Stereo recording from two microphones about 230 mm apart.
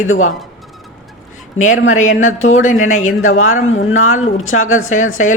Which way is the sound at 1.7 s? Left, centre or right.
Left.